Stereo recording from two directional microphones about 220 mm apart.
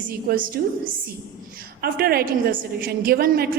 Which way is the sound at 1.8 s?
45° right (ahead or behind).